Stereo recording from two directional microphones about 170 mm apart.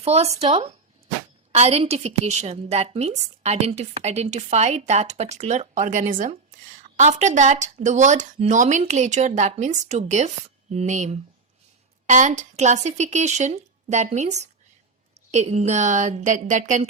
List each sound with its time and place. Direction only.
0.0 s a woman's voice: 40° right (ahead or behind)